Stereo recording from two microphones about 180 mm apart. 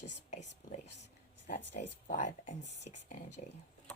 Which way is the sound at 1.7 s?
45° left (ahead or behind).